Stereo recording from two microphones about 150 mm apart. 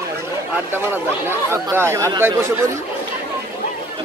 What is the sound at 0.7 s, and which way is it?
A man's voice, 15° right (ahead or behind).